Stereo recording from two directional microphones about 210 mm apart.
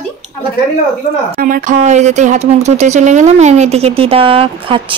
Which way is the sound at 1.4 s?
40° right (ahead or behind).